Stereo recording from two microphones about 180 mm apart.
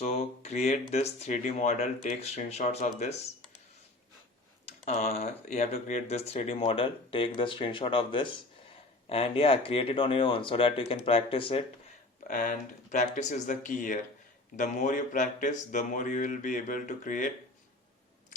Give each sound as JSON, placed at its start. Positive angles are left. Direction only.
{"t": 0.0, "sound": "speech", "side_deg": 40}
{"t": 4.9, "sound": "speech", "side_deg": 40}
{"t": 12.3, "sound": "speech", "side_deg": 50}